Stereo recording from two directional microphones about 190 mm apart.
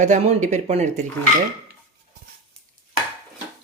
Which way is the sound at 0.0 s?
40° right (ahead or behind).